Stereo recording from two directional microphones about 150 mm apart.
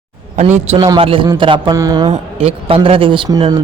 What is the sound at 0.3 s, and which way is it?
Speech, 50° right (ahead or behind).